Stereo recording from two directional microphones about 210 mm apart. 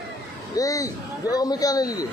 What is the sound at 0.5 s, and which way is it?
A man's voice, 15° left (ahead or behind).